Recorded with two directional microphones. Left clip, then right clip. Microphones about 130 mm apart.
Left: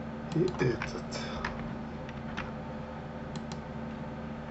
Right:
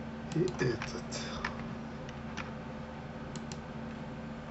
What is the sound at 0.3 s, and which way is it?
Speech, 20° right (ahead or behind).